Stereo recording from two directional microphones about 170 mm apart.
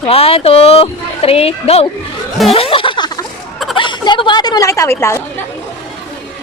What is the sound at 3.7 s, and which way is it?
Speech, 30° left (ahead or behind).